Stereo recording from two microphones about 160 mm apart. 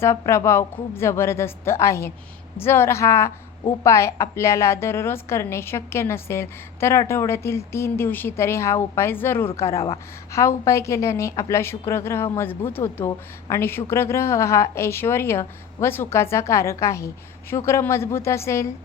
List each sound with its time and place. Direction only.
0.0 s a woman's voice: 15° left (ahead or behind)